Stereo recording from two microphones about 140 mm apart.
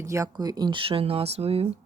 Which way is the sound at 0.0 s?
20° right (ahead or behind).